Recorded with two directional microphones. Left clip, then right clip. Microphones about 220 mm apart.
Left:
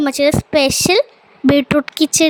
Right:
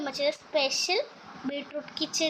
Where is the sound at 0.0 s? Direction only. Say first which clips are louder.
Left 14 dB; 55° left (ahead or behind).